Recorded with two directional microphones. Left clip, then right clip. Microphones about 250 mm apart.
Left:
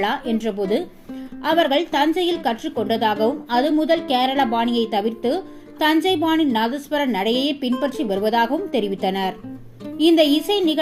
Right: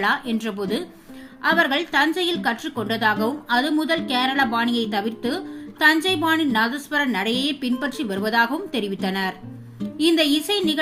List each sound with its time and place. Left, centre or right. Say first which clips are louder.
0.0 s a woman's voice: even; centre